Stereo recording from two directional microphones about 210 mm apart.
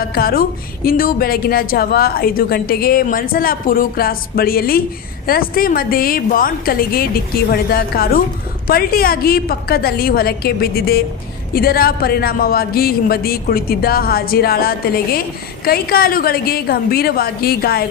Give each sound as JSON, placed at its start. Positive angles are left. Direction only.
{"t": 0.0, "sound": "a woman's voice", "side_deg": 45}